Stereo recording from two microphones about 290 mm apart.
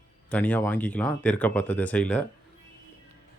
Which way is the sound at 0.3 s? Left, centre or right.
Centre.